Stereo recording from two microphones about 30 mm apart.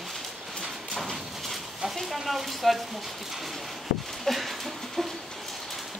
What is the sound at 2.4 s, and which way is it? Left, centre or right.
Speech, centre.